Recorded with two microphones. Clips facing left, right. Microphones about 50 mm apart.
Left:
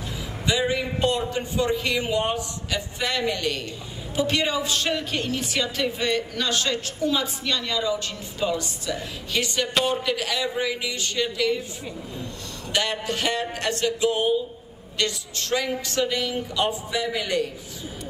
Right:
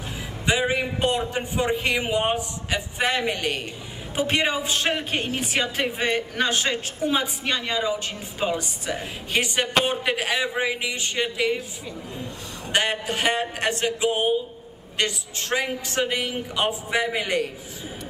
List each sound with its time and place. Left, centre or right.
0.5 s a woman's voice: right
12.7 s a woman's voice: right